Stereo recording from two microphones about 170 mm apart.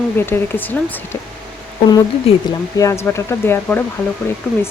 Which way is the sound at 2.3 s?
35° left (ahead or behind).